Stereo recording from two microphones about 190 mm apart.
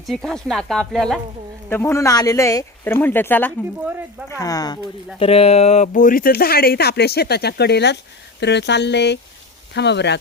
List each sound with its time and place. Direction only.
0.0 s speech: centre (ahead or behind)
1.7 s speech: 15° left (ahead or behind)
5.2 s speech: 30° left (ahead or behind); by 10.2 s 65° left (ahead or behind)